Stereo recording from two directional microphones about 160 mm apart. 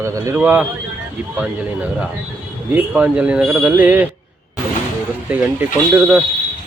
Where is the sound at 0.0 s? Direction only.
20° right (ahead or behind).